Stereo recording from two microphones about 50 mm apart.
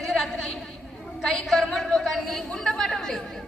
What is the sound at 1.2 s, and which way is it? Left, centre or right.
A man's voice, centre.